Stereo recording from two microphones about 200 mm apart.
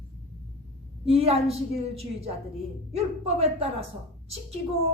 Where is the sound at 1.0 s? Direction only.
30° right (ahead or behind).